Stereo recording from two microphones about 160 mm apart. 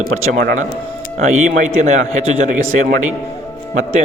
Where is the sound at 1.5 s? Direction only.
50° right (ahead or behind).